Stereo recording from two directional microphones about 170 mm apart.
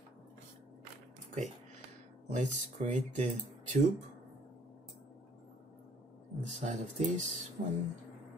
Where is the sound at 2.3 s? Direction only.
45° right (ahead or behind).